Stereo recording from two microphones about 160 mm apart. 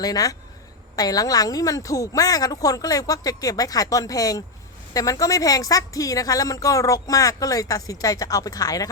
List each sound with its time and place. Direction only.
0.0 s a woman's voice: 25° left (ahead or behind)